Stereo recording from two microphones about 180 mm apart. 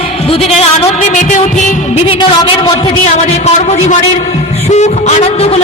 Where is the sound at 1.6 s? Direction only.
45° left (ahead or behind).